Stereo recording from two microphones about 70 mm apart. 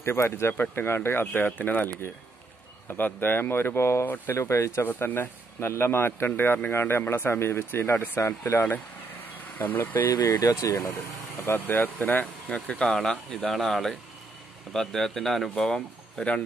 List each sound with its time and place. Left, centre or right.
0.0 s speech: left
4.0 s speech: left
4.4 s speech: left
4.8 s speech: left
10.0 s speech: left
11.4 s speech: left